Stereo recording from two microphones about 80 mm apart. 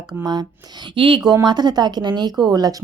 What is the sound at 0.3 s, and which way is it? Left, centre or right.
A woman's voice, right.